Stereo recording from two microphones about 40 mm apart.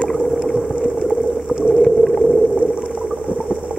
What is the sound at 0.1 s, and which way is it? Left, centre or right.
Boat, centre.